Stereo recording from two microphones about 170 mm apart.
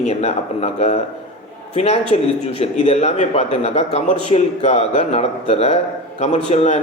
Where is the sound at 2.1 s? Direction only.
40° left (ahead or behind).